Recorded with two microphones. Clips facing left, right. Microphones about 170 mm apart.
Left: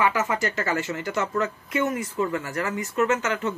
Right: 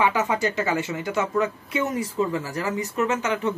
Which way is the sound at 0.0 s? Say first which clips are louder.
Right 2 dB; 15° right (ahead or behind).